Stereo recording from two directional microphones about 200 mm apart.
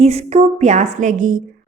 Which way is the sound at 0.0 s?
30° right (ahead or behind).